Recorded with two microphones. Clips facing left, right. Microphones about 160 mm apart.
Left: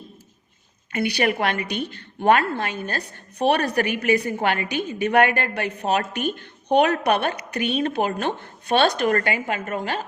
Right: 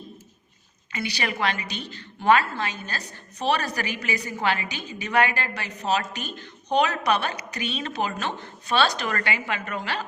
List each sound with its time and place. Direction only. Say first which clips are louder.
0.9 s a woman's voice: left 7 dB; 55° left (ahead or behind)